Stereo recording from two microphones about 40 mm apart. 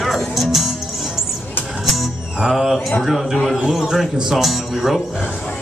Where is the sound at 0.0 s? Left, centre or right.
Centre.